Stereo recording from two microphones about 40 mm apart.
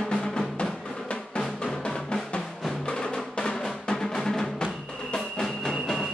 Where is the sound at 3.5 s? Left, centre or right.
Centre.